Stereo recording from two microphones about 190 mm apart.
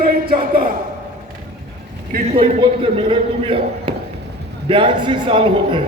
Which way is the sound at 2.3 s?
30° right (ahead or behind).